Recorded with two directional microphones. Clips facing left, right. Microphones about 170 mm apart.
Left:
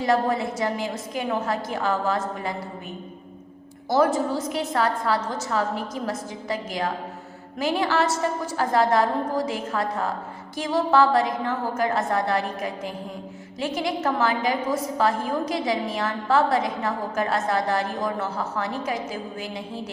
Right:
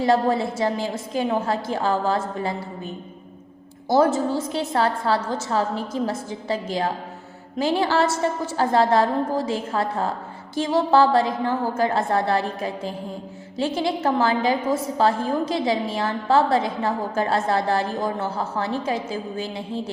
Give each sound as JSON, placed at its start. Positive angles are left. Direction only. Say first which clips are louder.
{"t": 0.0, "sound": "a woman's voice", "louder": "right 3 dB", "side_deg": -30}
{"t": 3.8, "sound": "a woman's voice", "louder": "right 2 dB", "side_deg": -25}